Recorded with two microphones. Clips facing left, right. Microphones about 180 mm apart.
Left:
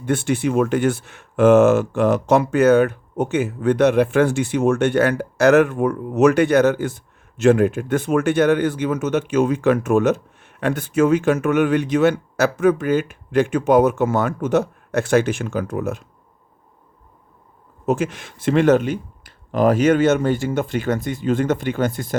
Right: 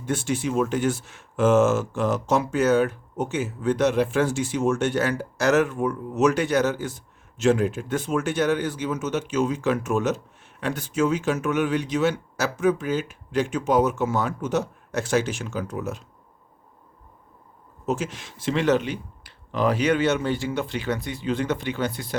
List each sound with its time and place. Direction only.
0.0 s speech: 60° left (ahead or behind)
17.8 s speech: 55° left (ahead or behind)